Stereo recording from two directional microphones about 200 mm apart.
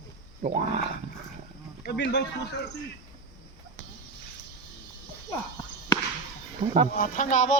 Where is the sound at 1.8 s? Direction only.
55° left (ahead or behind).